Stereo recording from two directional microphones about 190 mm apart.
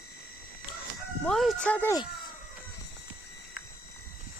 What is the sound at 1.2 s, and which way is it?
Speech, centre (ahead or behind).